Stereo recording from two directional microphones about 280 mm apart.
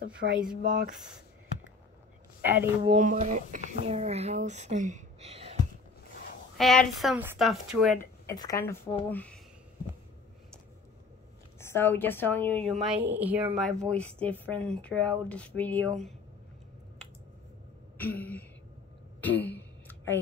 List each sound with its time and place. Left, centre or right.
0.2 s speech: right
2.4 s a woman's voice: centre
2.9 s speech: right
6.6 s a woman's voice: centre
11.6 s a woman's voice: centre
17.9 s a sound: centre